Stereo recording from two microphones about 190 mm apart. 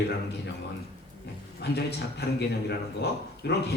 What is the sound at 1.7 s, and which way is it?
Speech, 60° left (ahead or behind).